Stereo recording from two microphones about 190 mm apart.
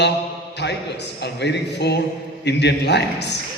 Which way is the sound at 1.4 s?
60° left (ahead or behind).